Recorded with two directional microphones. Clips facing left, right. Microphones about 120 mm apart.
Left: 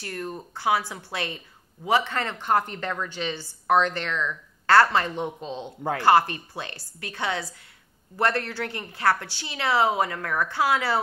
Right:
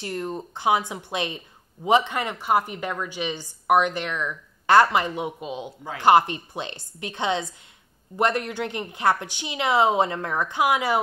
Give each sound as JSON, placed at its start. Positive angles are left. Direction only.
{"t": 0.0, "sound": "a woman's voice", "side_deg": -20}